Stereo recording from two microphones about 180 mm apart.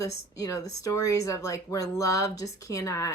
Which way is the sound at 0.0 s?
20° left (ahead or behind).